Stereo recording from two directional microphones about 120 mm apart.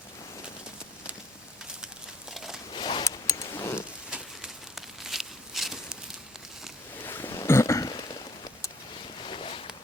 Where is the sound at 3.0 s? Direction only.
25° left (ahead or behind).